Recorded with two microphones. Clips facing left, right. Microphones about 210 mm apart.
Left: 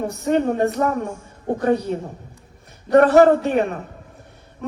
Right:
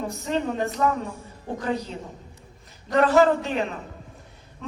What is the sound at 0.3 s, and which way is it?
A woman's voice, 60° left (ahead or behind).